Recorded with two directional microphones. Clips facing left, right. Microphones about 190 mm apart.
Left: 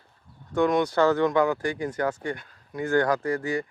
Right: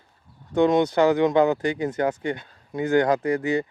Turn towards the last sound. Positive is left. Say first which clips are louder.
# right 4 dB
turn(degrees=-20)  # may be behind; listen again after turning